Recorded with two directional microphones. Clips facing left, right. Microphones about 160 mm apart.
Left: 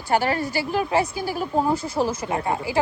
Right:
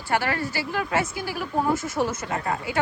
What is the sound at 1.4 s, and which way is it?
A woman's voice, 15° left (ahead or behind).